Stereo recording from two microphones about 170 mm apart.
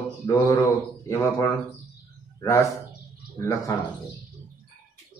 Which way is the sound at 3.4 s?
20° left (ahead or behind).